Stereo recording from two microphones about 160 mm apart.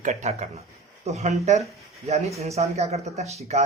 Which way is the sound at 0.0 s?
45° right (ahead or behind).